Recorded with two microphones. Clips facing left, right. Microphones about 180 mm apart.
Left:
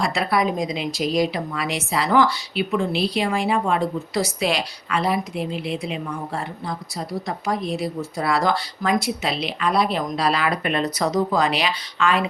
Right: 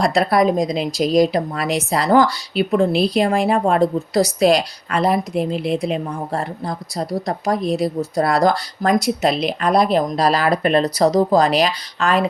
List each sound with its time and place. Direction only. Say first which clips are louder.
0.0 s a woman's voice: right 6 dB; 40° right (ahead or behind)